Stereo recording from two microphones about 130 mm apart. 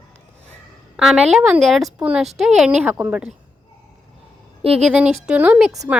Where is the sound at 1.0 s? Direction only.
5° right (ahead or behind).